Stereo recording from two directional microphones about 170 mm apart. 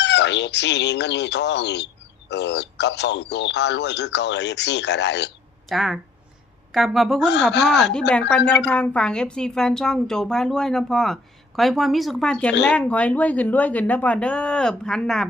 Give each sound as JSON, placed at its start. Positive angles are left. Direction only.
{"t": 0.0, "sound": "speech", "side_deg": 90}
{"t": 5.6, "sound": "a woman's voice", "side_deg": 0}
{"t": 7.5, "sound": "speech", "side_deg": 90}
{"t": 8.3, "sound": "a woman's voice", "side_deg": 5}